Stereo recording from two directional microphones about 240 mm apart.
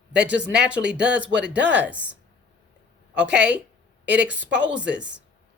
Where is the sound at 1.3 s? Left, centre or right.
Right.